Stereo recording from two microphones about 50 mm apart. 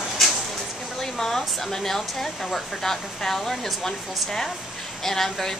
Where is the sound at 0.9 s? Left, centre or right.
Centre.